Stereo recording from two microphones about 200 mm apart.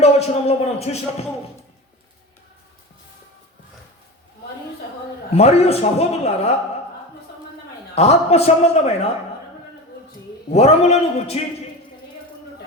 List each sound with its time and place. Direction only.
0.0 s a man's voice: 30° left (ahead or behind)
5.3 s a man's voice: 30° left (ahead or behind)
7.9 s a man's voice: 30° left (ahead or behind)
10.5 s a man's voice: 30° left (ahead or behind)